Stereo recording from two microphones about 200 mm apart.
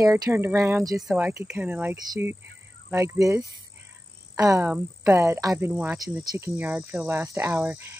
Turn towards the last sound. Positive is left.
turn(degrees=-10)  # may be behind; listen again after turning